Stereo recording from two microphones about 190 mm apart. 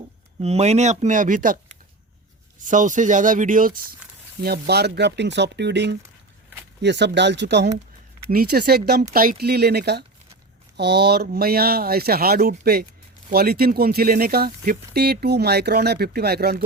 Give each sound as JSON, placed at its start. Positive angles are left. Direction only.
{"t": 0.4, "sound": "speech", "side_deg": -35}
{"t": 8.3, "sound": "speech", "side_deg": -55}